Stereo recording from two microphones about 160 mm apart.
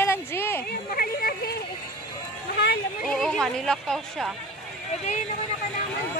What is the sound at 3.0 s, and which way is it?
Speech, 5° left (ahead or behind).